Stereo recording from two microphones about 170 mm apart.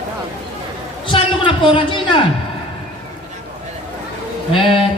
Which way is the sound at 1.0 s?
30° left (ahead or behind).